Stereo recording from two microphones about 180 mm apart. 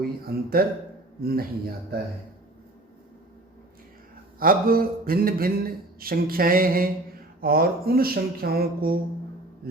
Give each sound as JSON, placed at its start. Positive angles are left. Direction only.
{"t": 0.0, "sound": "speech", "side_deg": -55}
{"t": 4.4, "sound": "a sound", "side_deg": -55}
{"t": 7.4, "sound": "speech", "side_deg": -55}